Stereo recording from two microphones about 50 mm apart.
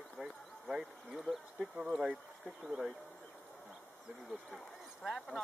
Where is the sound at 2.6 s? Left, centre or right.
Centre.